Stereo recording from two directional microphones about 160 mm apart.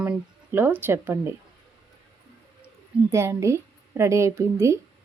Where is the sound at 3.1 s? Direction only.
15° right (ahead or behind).